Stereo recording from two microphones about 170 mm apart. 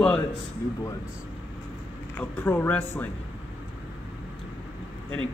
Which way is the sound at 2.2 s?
10° left (ahead or behind).